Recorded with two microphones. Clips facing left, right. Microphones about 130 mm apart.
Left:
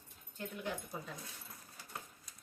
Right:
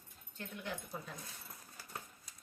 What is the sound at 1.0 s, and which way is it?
Speech, 10° left (ahead or behind).